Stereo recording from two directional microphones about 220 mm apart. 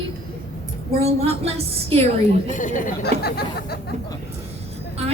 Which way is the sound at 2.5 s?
35° left (ahead or behind).